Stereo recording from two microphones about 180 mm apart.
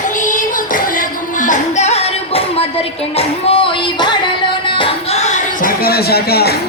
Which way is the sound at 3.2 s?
30° left (ahead or behind).